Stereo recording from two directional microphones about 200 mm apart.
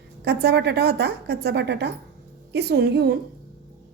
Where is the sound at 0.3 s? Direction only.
55° right (ahead or behind).